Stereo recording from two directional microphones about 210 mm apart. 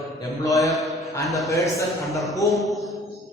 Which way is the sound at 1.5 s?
15° left (ahead or behind).